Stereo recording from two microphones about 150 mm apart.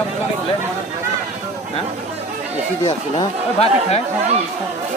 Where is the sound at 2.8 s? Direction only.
45° left (ahead or behind).